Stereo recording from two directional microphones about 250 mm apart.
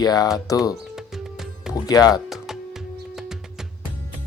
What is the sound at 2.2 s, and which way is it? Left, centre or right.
Music, centre.